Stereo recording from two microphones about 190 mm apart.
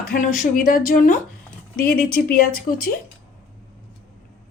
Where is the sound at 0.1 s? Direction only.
45° left (ahead or behind).